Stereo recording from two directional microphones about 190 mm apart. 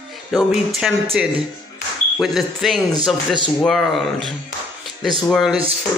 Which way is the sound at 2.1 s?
Centre (ahead or behind).